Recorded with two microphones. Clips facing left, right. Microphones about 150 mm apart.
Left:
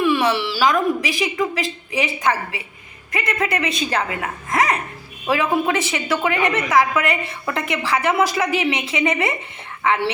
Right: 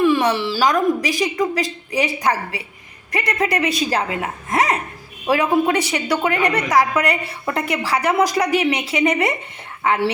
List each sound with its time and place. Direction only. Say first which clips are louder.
0.0 s speech: right 2 dB; 40° right (ahead or behind)
4.4 s a sound: even; 30° right (ahead or behind)
5.6 s speech: right 2 dB; 35° right (ahead or behind)